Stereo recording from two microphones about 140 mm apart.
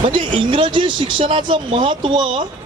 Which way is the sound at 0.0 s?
35° right (ahead or behind).